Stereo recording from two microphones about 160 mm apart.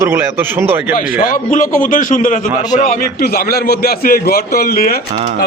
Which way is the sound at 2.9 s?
70° left (ahead or behind).